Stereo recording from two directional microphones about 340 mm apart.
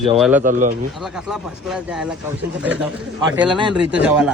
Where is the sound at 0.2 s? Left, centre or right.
Centre.